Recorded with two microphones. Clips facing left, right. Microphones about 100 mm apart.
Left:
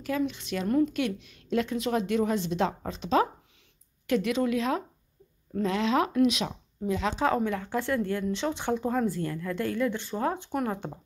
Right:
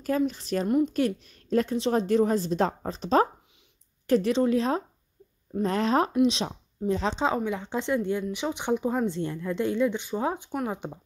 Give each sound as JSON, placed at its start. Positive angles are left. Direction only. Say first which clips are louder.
{"t": 0.0, "sound": "a woman's voice", "louder": "right 3 dB", "side_deg": -40}
{"t": 0.7, "sound": "a woman's voice", "louder": "even", "side_deg": -20}
{"t": 0.9, "sound": "a woman's voice", "louder": "right 4 dB", "side_deg": -40}
{"t": 6.1, "sound": "a woman's voice", "louder": "right 1 dB", "side_deg": -25}